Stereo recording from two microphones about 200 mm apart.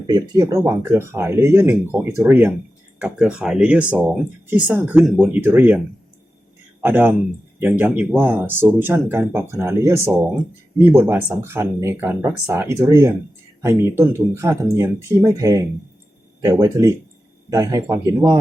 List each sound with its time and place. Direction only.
0.1 s speech: 15° right (ahead or behind)
6.8 s speech: 10° right (ahead or behind)